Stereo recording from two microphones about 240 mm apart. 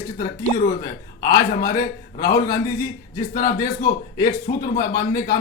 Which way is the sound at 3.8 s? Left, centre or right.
Centre.